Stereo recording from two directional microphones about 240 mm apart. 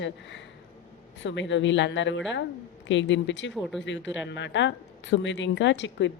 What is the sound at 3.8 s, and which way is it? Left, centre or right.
A woman's voice, left.